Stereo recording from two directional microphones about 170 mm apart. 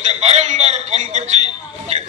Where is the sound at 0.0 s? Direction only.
40° right (ahead or behind).